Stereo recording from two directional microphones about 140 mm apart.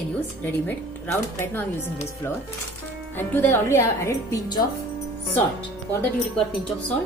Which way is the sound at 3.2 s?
15° left (ahead or behind).